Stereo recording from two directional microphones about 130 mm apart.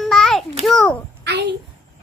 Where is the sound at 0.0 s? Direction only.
5° left (ahead or behind).